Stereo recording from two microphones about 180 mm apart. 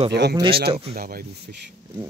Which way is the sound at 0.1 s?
70° right (ahead or behind).